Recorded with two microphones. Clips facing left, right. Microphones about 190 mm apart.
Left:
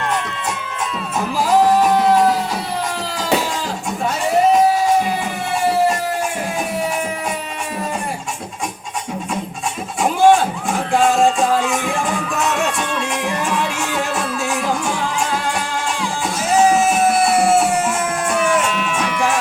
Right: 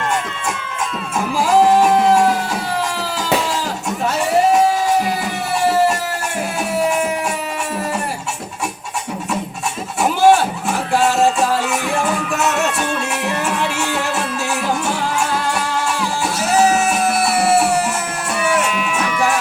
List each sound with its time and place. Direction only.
10.2 s music: 70° right (ahead or behind)
10.9 s music: 5° right (ahead or behind)
11.7 s music: 70° right (ahead or behind)
17.2 s music: 70° right (ahead or behind)
18.3 s music: 5° right (ahead or behind)